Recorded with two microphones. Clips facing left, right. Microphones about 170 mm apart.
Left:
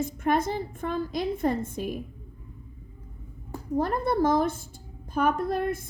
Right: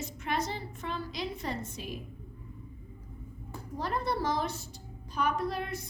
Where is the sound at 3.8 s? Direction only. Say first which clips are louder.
Left 7 dB; 50° left (ahead or behind).